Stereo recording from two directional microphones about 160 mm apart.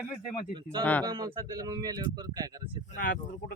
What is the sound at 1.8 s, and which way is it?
Speech, 25° right (ahead or behind).